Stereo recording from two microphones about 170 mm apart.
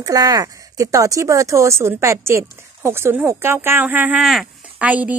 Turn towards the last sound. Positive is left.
turn(degrees=-10)  # may be behind; listen again after turning